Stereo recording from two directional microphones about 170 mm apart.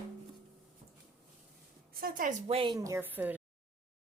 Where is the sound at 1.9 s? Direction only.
55° right (ahead or behind).